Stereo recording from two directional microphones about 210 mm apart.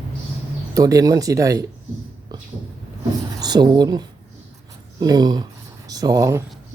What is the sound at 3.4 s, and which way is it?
Speech, 20° right (ahead or behind).